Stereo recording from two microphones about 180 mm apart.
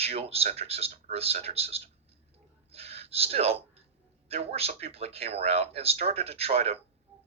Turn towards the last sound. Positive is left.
turn(degrees=-35)  # may be behind; listen again after turning